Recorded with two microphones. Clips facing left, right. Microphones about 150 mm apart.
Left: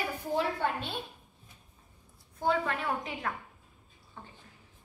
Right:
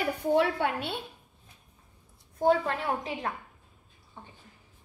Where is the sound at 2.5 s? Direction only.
30° right (ahead or behind).